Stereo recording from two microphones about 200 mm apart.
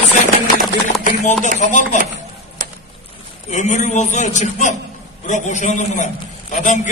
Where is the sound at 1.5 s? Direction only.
35° left (ahead or behind).